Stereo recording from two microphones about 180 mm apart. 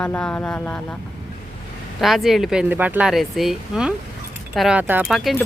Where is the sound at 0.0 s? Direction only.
5° left (ahead or behind).